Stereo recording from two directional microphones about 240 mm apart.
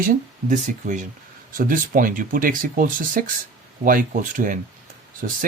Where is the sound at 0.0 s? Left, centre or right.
Right.